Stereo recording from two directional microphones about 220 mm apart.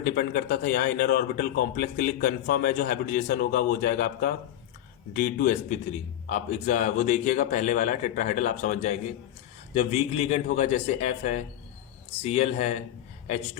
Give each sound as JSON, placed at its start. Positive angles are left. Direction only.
{"t": 0.0, "sound": "speech", "side_deg": 40}